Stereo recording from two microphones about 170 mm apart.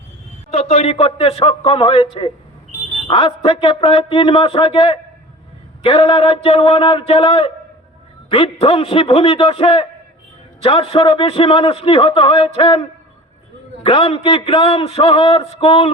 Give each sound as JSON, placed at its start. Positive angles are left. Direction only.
{"t": 0.5, "sound": "a man's voice", "side_deg": 40}